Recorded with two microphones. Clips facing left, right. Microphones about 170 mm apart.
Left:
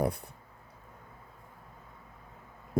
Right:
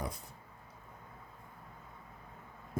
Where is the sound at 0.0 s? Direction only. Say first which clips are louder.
Left 11 dB; 60° left (ahead or behind).